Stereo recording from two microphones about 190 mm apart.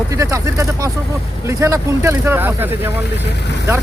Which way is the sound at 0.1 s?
15° right (ahead or behind).